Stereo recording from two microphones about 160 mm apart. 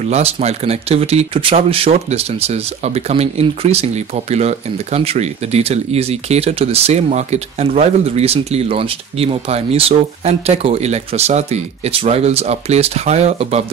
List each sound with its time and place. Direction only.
0.1 s speech: 40° right (ahead or behind)